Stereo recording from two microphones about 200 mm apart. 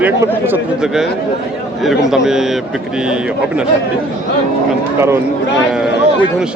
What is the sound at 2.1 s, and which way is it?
Speech, centre (ahead or behind).